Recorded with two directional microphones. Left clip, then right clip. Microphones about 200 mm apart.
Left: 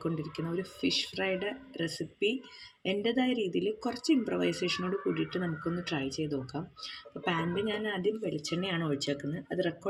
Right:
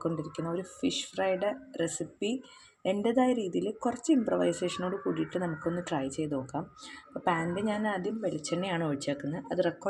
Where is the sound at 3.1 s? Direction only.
40° right (ahead or behind).